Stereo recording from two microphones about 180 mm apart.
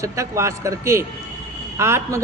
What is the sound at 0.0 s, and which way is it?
Speech, 15° right (ahead or behind).